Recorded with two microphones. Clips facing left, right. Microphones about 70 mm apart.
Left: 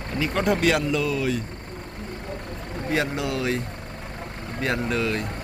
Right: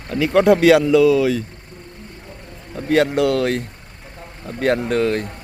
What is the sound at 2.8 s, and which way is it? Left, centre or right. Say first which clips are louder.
Speech: right 10 dB; right.